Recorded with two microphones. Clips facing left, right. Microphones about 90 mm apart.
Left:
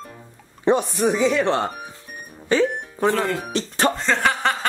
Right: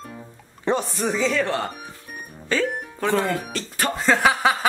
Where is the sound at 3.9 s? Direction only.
5° right (ahead or behind).